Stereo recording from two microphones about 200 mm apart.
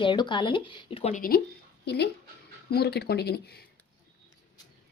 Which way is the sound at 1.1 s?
45° left (ahead or behind).